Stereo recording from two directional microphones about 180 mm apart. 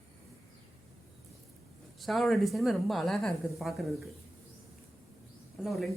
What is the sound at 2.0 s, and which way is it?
Speech, centre (ahead or behind).